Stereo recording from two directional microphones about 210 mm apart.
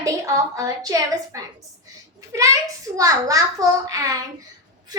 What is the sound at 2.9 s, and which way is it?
A child's voice, 15° right (ahead or behind).